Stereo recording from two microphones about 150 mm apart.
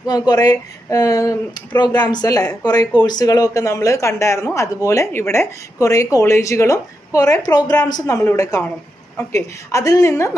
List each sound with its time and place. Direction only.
0.0 s speech: 25° left (ahead or behind)